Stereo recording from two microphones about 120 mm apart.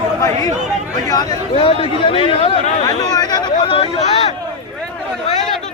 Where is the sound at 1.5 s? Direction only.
50° left (ahead or behind).